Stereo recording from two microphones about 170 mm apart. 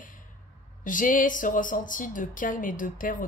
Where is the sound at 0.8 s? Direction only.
50° left (ahead or behind).